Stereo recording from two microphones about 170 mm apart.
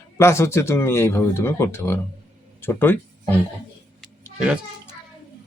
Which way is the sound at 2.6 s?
15° left (ahead or behind).